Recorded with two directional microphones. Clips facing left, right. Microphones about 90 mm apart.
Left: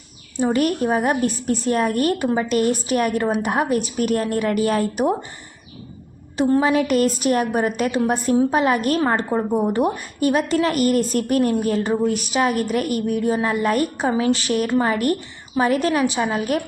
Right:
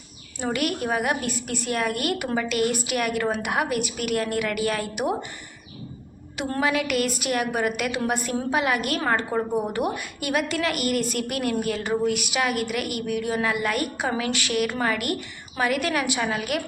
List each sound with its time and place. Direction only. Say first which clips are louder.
0.3 s a woman's voice: left 7 dB; 30° left (ahead or behind)
6.6 s a woman's voice: left 2 dB; 35° left (ahead or behind)
9.0 s a woman's voice: left 4 dB; 25° left (ahead or behind)